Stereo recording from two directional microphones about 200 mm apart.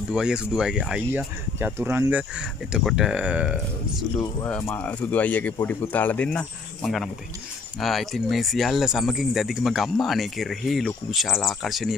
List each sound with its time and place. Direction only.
0.1 s speech: 5° right (ahead or behind)
4.2 s speech: 10° left (ahead or behind)